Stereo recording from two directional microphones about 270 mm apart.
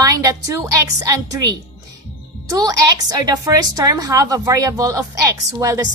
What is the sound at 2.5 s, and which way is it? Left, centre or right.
A woman's voice, centre.